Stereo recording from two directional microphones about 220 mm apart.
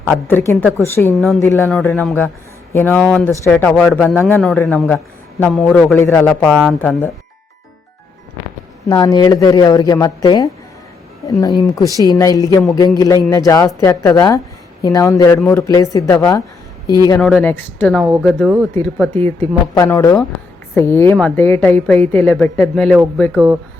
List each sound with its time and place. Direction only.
0.1 s a woman's voice: 10° left (ahead or behind)
0.6 s speech: 10° right (ahead or behind)
1.4 s a woman's voice: 10° left (ahead or behind)
8.9 s a woman's voice: 15° left (ahead or behind)
17.2 s speech: 5° left (ahead or behind)
18.4 s speech: 5° right (ahead or behind)
18.7 s a woman's voice: 5° left (ahead or behind)